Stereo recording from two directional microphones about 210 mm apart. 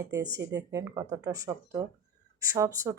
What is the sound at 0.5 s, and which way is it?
Speech, 15° right (ahead or behind).